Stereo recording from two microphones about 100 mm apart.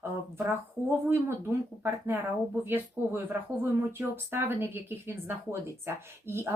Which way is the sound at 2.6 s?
20° right (ahead or behind).